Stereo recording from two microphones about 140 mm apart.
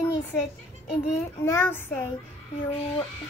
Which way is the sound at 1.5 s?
15° left (ahead or behind).